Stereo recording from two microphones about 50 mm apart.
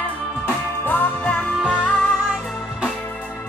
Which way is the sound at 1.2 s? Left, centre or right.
Left.